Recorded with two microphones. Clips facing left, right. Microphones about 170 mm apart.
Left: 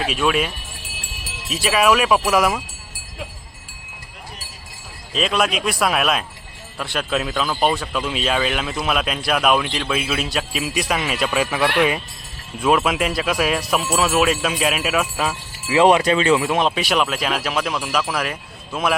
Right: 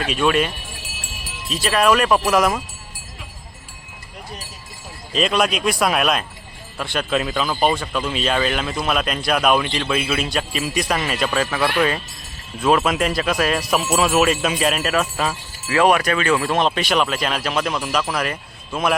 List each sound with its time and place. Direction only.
0.0 s speech: 5° left (ahead or behind)
5.1 s speech: centre (ahead or behind)
15.7 s speech: 20° left (ahead or behind)
16.4 s speech: 5° left (ahead or behind)